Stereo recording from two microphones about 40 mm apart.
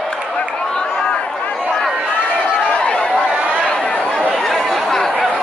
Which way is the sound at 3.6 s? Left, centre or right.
Left.